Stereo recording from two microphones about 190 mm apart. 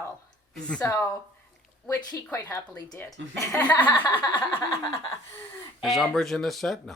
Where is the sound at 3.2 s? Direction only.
75° right (ahead or behind).